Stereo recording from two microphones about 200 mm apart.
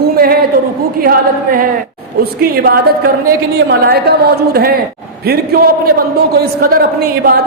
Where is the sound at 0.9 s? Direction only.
45° right (ahead or behind).